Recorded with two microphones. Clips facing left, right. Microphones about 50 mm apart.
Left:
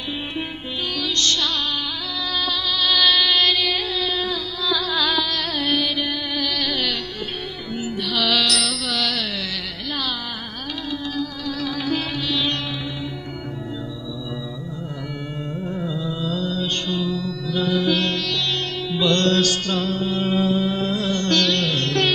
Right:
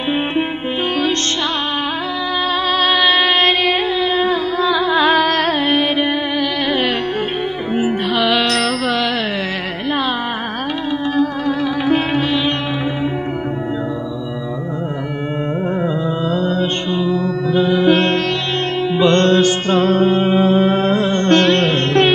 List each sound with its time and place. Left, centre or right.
2.7 s music: right
11.1 s music: right
15.8 s music: right